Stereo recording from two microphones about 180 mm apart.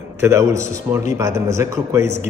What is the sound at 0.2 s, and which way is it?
A man's voice, 15° right (ahead or behind).